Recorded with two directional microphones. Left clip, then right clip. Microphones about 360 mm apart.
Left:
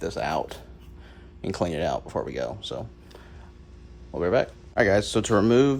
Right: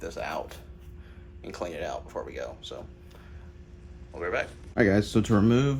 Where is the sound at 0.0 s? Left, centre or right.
Left.